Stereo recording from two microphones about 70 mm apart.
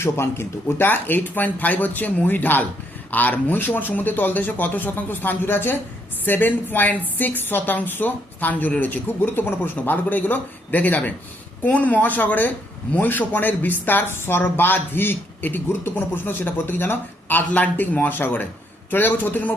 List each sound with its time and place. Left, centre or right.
0.0 s a man's voice: left